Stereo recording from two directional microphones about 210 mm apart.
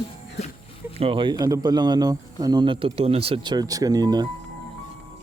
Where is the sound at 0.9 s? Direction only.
25° right (ahead or behind).